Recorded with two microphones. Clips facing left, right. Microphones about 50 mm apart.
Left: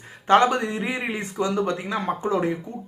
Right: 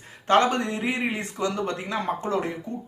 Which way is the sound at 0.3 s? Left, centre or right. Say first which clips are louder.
Left 2 dB; centre.